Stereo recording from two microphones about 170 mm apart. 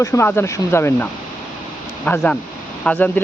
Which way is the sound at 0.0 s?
15° left (ahead or behind).